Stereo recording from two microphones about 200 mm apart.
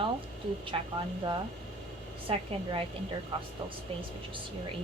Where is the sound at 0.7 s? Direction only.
20° right (ahead or behind).